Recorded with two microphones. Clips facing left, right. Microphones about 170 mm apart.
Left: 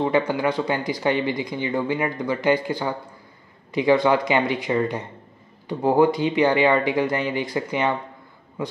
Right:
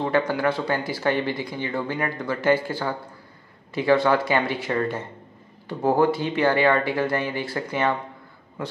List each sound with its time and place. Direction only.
0.3 s speech: 15° left (ahead or behind)